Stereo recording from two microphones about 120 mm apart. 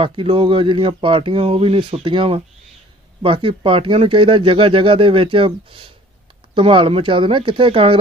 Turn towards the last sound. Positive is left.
turn(degrees=-50)  # may be behind; listen again after turning